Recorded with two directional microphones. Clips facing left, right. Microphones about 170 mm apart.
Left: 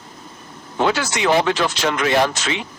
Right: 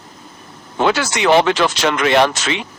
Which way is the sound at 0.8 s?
85° right.